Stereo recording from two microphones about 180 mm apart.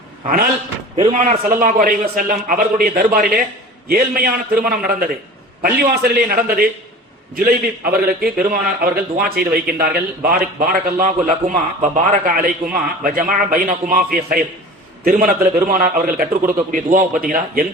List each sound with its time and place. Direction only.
1.0 s a man's voice: 40° right (ahead or behind)